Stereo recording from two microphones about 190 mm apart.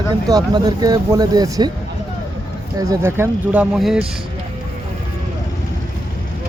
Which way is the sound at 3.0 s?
10° right (ahead or behind).